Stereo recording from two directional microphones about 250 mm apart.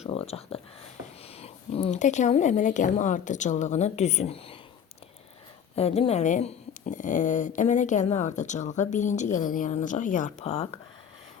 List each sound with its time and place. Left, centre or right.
0.0 s a sound: left
1.4 s speech: left
5.7 s speech: left